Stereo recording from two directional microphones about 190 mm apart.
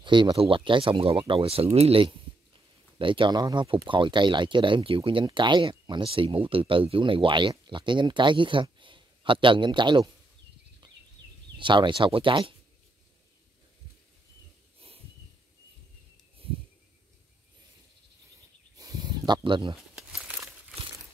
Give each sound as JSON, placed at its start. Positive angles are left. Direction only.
{"t": 0.0, "sound": "speech", "side_deg": -25}
{"t": 11.5, "sound": "speech", "side_deg": -25}
{"t": 18.8, "sound": "a sound", "side_deg": -20}
{"t": 20.0, "sound": "crumpling", "side_deg": -5}